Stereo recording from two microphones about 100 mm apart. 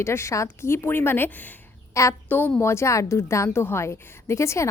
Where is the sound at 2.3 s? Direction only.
20° left (ahead or behind).